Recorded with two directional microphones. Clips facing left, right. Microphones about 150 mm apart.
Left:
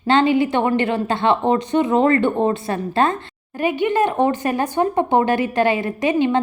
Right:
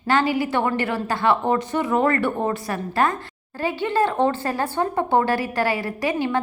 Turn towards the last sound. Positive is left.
turn(degrees=20)  # may be behind; listen again after turning